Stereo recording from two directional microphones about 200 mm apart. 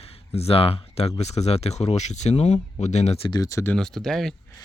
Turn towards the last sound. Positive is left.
turn(degrees=0)  # may be behind; listen again after turning